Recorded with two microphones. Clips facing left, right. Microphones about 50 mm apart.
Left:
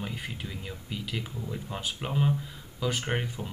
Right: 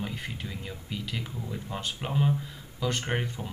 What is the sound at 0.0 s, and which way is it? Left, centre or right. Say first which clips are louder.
Speech: right 1 dB; centre.